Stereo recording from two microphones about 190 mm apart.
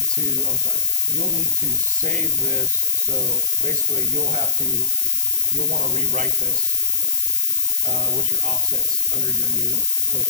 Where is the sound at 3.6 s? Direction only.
45° right (ahead or behind).